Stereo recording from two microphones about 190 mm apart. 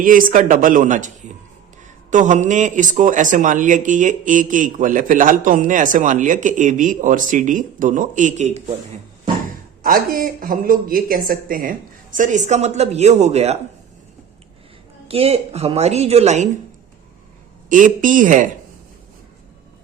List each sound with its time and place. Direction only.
0.0 s a man's voice: 45° right (ahead or behind)
9.8 s a man's voice: 50° right (ahead or behind)
15.0 s a woman's voice: 30° right (ahead or behind)
17.7 s a man's voice: 45° right (ahead or behind)